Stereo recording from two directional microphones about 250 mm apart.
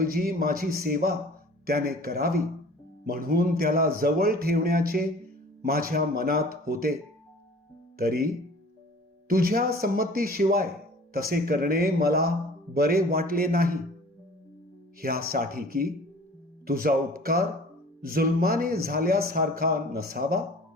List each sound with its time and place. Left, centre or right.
0.0 s a man's voice: right
9.3 s a man's voice: right
15.0 s a man's voice: right